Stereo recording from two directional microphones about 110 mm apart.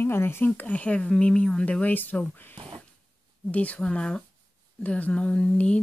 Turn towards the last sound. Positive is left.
turn(degrees=10)  # may be behind; listen again after turning